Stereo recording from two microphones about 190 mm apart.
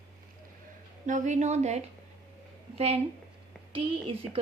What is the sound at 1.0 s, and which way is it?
A woman's voice, 40° right (ahead or behind).